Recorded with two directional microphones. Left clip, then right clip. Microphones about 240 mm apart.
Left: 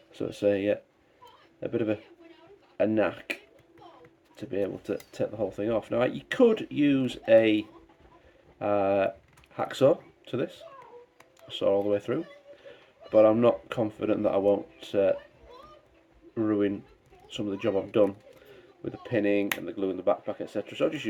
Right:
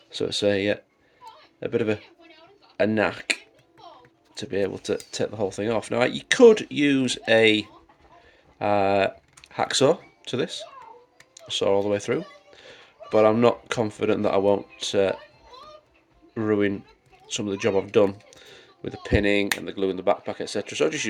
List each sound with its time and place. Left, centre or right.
0.1 s speech: right
4.4 s speech: right
11.6 s speech: right
16.3 s speech: right